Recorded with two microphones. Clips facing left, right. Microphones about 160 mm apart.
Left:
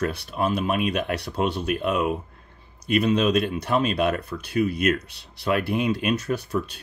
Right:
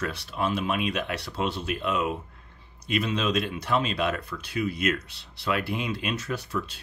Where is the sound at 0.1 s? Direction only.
55° left (ahead or behind).